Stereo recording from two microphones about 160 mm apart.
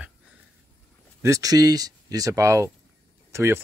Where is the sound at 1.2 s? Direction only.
20° right (ahead or behind).